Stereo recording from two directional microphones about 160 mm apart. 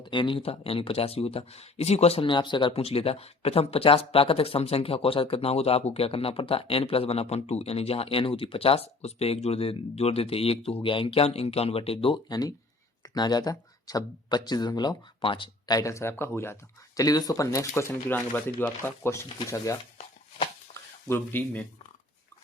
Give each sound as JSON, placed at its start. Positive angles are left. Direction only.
{"t": 0.0, "sound": "speech", "side_deg": 30}
{"t": 20.7, "sound": "a sound", "side_deg": 50}
{"t": 21.1, "sound": "speech", "side_deg": 10}